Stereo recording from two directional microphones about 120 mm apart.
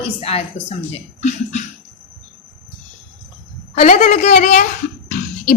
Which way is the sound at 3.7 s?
75° left (ahead or behind).